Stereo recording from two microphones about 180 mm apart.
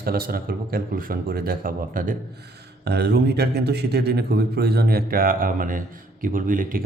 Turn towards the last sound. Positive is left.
turn(degrees=-50)  # may be behind; listen again after turning